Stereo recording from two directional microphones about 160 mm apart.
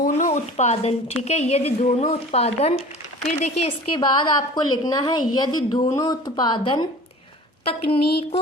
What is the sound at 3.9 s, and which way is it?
A woman's voice, 30° left (ahead or behind).